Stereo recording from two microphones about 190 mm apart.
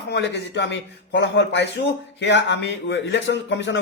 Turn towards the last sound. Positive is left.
turn(degrees=65)  # may be behind; listen again after turning